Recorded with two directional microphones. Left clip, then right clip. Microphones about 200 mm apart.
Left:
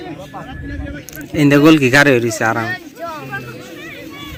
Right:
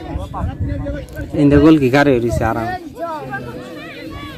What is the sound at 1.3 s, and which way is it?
Speech, 5° left (ahead or behind).